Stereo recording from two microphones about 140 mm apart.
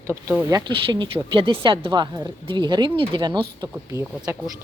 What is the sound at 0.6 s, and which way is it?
A woman's voice, 35° right (ahead or behind).